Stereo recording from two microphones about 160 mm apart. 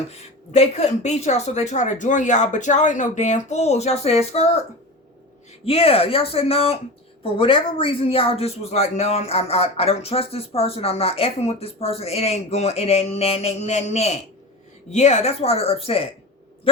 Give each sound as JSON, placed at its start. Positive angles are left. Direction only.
{"t": 0.1, "sound": "a woman's voice", "side_deg": 40}
{"t": 5.6, "sound": "speech", "side_deg": 35}